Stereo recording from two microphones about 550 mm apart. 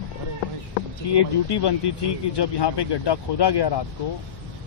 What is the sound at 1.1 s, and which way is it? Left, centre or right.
Speech, left.